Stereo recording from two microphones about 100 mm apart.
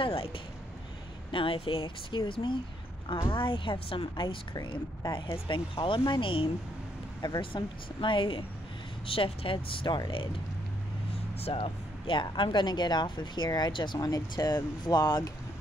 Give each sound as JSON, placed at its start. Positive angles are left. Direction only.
{"t": 0.0, "sound": "speech", "side_deg": 65}
{"t": 7.2, "sound": "speech", "side_deg": 50}
{"t": 11.4, "sound": "speech", "side_deg": 65}
{"t": 13.9, "sound": "speech", "side_deg": 35}